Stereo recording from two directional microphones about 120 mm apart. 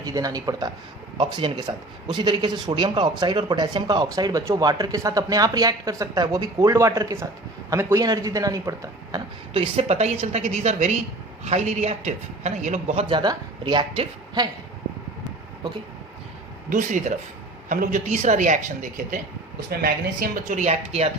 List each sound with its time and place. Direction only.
0.0 s a man's voice: 30° right (ahead or behind)
1.2 s a man's voice: 45° right (ahead or behind); by 9.2 s 25° right (ahead or behind)
9.5 s a woman's voice: 55° right (ahead or behind); by 13.0 s 90° right
13.0 s speech: 40° right (ahead or behind)
16.7 s speech: 90° right
20.5 s speech: 70° right (ahead or behind)